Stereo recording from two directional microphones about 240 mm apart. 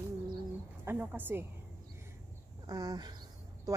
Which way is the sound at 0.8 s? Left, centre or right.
Centre.